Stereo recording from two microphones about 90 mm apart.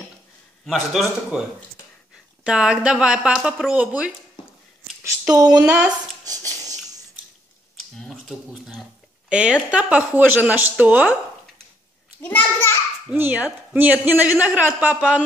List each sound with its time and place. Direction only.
0.7 s a man's voice: centre (ahead or behind)
1.3 s speech: 10° right (ahead or behind)
5.3 s speech: 45° right (ahead or behind)
5.6 s speech: 20° right (ahead or behind)
6.2 s a sound: 45° right (ahead or behind)
8.0 s a sound: 5° left (ahead or behind)
9.3 s speech: 10° right (ahead or behind)
12.2 s a child's voice: 20° left (ahead or behind)
13.1 s speech: 20° right (ahead or behind)